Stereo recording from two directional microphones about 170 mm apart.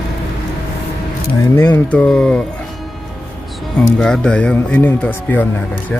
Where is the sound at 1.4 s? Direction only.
15° left (ahead or behind).